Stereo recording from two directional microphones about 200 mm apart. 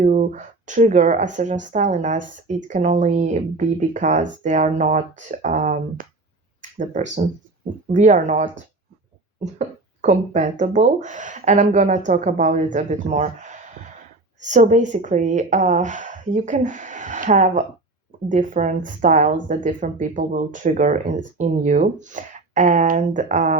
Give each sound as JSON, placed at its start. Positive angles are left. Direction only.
{"t": 0.0, "sound": "speech", "side_deg": -40}
{"t": 6.6, "sound": "a sound", "side_deg": -40}
{"t": 7.9, "sound": "speech", "side_deg": -40}